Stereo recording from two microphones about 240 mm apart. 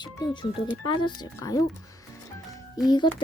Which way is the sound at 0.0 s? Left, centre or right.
Centre.